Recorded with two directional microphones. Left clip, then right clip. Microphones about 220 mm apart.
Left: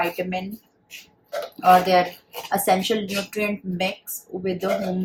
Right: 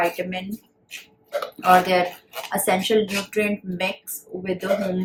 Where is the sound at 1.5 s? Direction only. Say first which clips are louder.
Left 1 dB; 10° left (ahead or behind).